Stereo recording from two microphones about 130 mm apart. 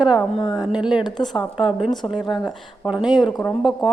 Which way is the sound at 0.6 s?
5° right (ahead or behind).